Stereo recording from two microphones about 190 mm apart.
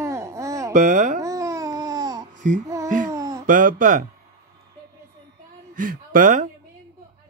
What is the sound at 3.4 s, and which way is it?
Speech, 45° right (ahead or behind).